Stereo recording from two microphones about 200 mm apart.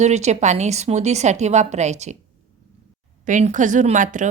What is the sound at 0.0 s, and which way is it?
Speech, 35° right (ahead or behind).